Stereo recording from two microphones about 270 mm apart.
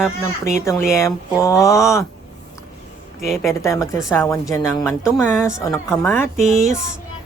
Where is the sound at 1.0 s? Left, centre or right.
Centre.